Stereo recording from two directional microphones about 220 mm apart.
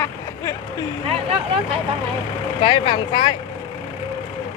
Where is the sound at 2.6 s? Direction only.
25° left (ahead or behind).